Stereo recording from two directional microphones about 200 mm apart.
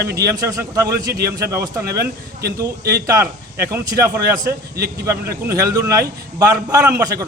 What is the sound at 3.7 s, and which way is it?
Speech, 15° right (ahead or behind).